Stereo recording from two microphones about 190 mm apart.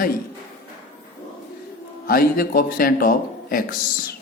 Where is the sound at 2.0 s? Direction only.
50° left (ahead or behind).